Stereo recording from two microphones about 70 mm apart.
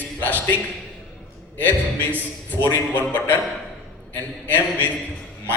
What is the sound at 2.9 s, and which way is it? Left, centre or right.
Speech, left.